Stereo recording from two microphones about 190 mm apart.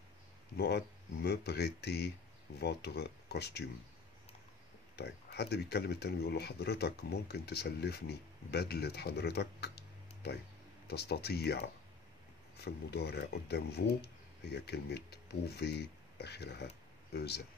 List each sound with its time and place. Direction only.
0.6 s speech: 60° left (ahead or behind)
4.9 s speech: 60° left (ahead or behind)